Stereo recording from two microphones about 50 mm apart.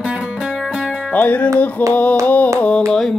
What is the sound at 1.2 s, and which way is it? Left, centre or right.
Music, left.